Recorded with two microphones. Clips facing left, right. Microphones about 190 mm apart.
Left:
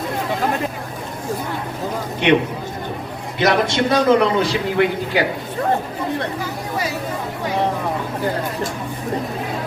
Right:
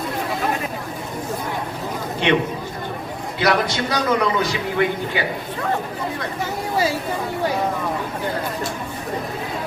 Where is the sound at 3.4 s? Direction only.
25° left (ahead or behind).